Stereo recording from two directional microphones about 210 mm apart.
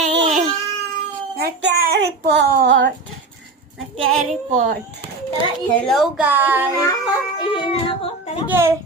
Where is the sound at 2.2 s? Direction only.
45° right (ahead or behind).